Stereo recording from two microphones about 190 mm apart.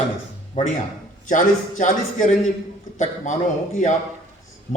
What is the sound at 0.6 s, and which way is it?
A man's voice, 40° left (ahead or behind).